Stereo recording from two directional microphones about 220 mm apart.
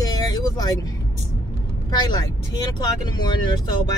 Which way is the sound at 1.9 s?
20° left (ahead or behind).